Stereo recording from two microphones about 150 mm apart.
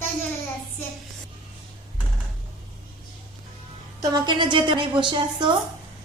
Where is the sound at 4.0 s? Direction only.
25° right (ahead or behind).